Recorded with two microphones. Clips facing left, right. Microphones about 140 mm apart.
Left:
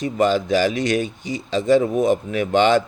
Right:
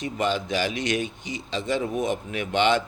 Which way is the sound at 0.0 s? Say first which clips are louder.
Left 7 dB; 40° left (ahead or behind).